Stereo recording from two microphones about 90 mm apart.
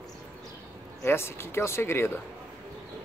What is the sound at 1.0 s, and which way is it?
Speech, 30° left (ahead or behind).